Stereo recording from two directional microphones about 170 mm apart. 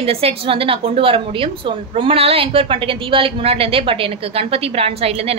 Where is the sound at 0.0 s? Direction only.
35° right (ahead or behind).